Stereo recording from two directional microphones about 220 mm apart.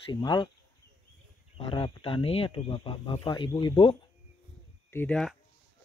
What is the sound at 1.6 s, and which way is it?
Speech, 25° left (ahead or behind).